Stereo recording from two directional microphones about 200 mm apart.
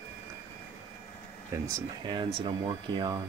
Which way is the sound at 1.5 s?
15° right (ahead or behind).